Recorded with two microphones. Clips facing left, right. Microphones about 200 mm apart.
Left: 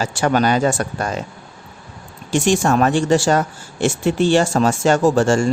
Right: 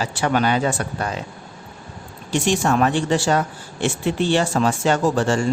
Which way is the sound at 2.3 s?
45° left (ahead or behind).